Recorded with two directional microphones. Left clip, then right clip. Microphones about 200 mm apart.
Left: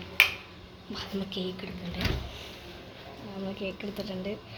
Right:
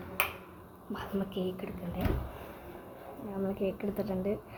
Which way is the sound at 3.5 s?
5° right (ahead or behind).